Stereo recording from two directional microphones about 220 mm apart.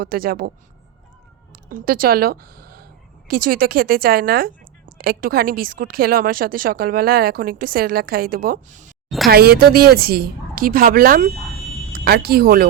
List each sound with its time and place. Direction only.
0.0 s speech: 40° right (ahead or behind)
1.7 s a woman's voice: 40° right (ahead or behind)
9.0 s speech: centre (ahead or behind)
9.3 s a woman's voice: 45° right (ahead or behind)